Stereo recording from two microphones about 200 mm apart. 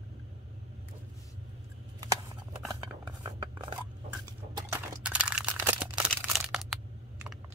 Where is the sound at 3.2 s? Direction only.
20° right (ahead or behind).